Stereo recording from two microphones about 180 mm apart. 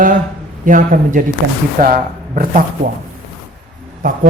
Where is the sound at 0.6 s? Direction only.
50° right (ahead or behind).